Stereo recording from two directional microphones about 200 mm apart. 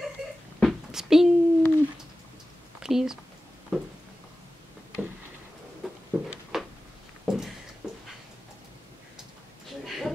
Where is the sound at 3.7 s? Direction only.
Centre (ahead or behind).